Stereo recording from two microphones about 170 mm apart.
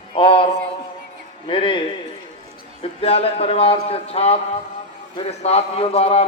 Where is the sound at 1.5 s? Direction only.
30° left (ahead or behind).